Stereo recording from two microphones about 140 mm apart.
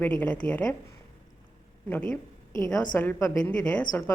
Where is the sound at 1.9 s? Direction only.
10° left (ahead or behind).